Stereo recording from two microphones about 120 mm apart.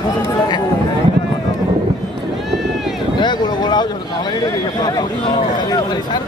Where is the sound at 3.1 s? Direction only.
35° left (ahead or behind).